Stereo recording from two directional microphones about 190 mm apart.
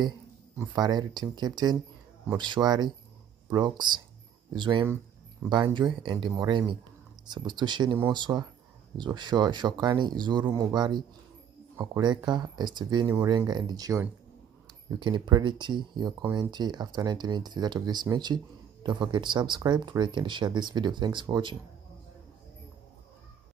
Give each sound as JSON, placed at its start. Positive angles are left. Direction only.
{"t": 0.6, "sound": "speech", "side_deg": -20}